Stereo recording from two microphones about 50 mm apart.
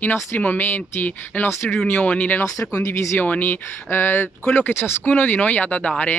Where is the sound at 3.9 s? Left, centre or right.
Left.